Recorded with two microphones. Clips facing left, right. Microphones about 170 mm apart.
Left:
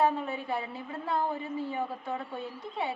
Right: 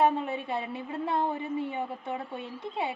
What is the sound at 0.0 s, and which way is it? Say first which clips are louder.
A woman's voice: right 2 dB; 25° right (ahead or behind).